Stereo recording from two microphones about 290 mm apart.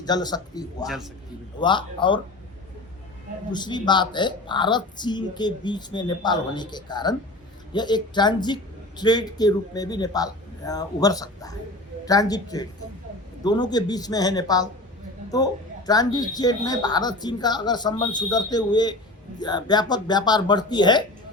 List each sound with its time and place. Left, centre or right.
0.0 s speech: centre
0.9 s a man's voice: centre
1.5 s speech: centre
3.5 s speech: centre
15.9 s speech: centre